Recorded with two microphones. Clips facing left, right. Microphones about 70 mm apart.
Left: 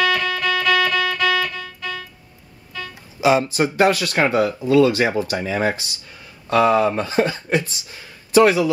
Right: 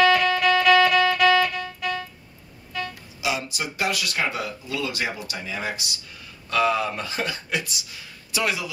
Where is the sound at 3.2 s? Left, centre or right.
Left.